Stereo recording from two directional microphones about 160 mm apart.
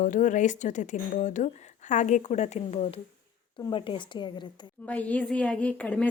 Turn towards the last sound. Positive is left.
turn(degrees=10)  # may be behind; listen again after turning